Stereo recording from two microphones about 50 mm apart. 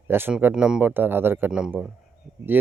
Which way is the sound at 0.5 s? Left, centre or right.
Centre.